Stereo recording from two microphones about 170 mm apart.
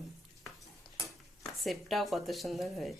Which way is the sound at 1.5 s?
Centre (ahead or behind).